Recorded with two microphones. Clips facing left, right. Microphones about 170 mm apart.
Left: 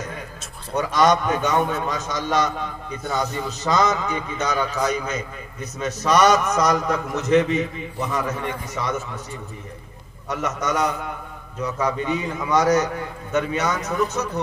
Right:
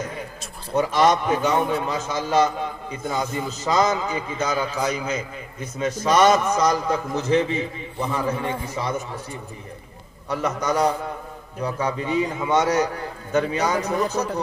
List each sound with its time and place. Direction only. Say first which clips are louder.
0.7 s a man's voice: even; 30° right (ahead or behind)
10.2 s a man's voice: right 1 dB; 30° right (ahead or behind)